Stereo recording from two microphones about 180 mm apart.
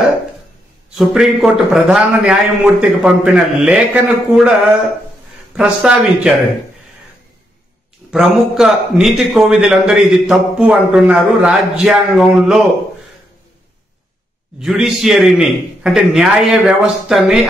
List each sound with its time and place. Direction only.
0.9 s a man's voice: centre (ahead or behind)
8.1 s a man's voice: 5° right (ahead or behind)
14.6 s a man's voice: centre (ahead or behind)